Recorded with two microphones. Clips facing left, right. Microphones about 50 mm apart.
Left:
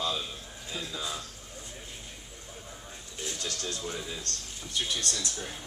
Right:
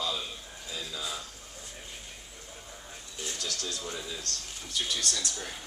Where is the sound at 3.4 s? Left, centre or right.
Left.